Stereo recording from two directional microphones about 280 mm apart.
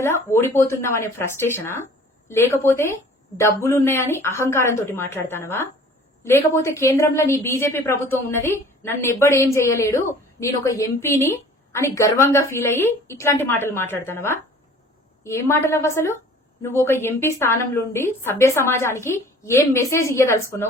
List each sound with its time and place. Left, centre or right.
0.0 s a woman's voice: centre